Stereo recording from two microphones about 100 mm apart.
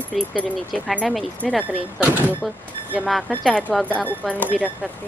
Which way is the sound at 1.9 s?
15° right (ahead or behind).